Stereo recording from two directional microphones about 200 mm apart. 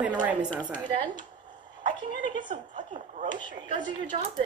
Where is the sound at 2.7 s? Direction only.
40° right (ahead or behind).